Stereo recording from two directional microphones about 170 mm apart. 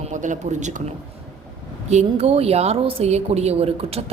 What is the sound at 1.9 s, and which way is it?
A woman's voice, 40° right (ahead or behind).